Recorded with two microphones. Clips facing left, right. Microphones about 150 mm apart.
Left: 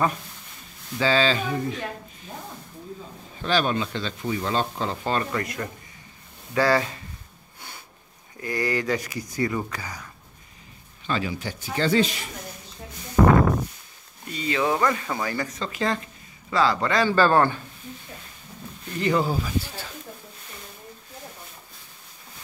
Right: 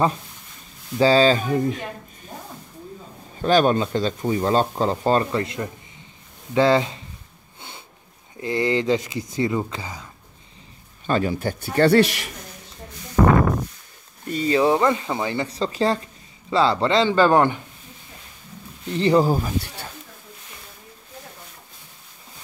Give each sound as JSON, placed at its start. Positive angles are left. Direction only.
{"t": 0.9, "sound": "speech", "side_deg": -35}
{"t": 3.4, "sound": "speech", "side_deg": -45}
{"t": 5.3, "sound": "speech", "side_deg": -25}
{"t": 8.4, "sound": "speech", "side_deg": -25}
{"t": 11.1, "sound": "a man's voice", "side_deg": -45}
{"t": 14.3, "sound": "speech", "side_deg": -35}
{"t": 18.9, "sound": "speech", "side_deg": -30}
{"t": 19.6, "sound": "speech", "side_deg": -65}